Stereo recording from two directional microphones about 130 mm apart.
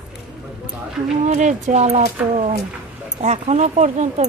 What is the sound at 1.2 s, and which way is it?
Speech, 65° right (ahead or behind).